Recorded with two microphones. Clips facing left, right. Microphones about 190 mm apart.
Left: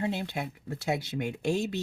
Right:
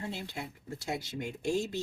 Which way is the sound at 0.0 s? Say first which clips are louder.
Left 7 dB; 65° left (ahead or behind).